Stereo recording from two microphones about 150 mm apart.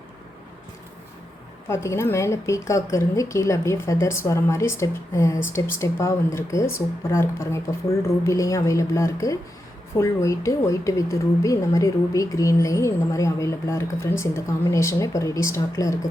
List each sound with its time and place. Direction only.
1.6 s a woman's voice: 20° left (ahead or behind)